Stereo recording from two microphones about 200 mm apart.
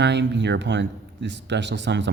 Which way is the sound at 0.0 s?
60° right (ahead or behind).